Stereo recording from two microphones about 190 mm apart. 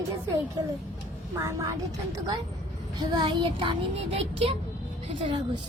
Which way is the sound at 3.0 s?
25° right (ahead or behind).